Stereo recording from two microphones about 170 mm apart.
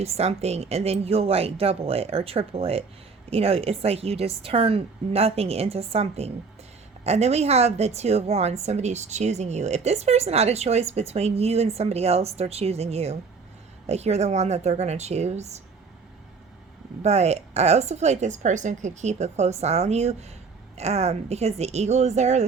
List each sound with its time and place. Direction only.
0.0 s a woman's voice: 40° right (ahead or behind)
17.0 s a woman's voice: 40° right (ahead or behind)